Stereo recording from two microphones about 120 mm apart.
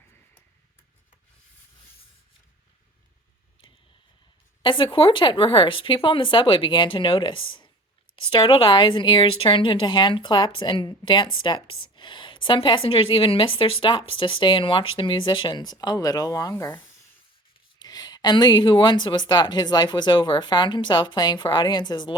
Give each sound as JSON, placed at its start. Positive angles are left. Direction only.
{"t": 4.6, "sound": "a woman's voice", "side_deg": 45}
{"t": 17.7, "sound": "speech", "side_deg": 35}